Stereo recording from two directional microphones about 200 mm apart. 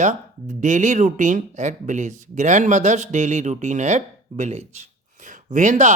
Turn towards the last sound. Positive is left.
turn(degrees=-40)  # may be behind; listen again after turning